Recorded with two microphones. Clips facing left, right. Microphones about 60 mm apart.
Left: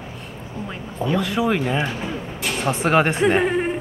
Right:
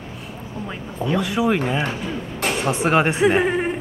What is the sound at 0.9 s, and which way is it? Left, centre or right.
A woman's voice, centre.